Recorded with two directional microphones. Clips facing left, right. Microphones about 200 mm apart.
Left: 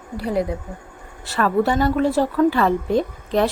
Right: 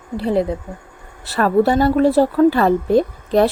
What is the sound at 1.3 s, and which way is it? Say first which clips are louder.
Speech: right 4 dB; 40° right (ahead or behind).